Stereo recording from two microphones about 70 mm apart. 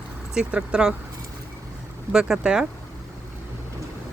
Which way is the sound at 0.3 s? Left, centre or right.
Centre.